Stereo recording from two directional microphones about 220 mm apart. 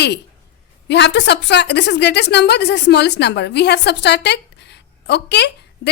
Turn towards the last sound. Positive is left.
turn(degrees=50)  # may be behind; listen again after turning